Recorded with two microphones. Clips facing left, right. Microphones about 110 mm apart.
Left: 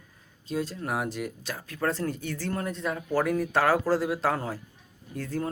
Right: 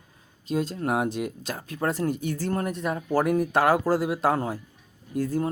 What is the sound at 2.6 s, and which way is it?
Speech, 15° right (ahead or behind).